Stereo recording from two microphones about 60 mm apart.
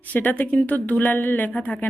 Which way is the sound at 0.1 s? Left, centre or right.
Left.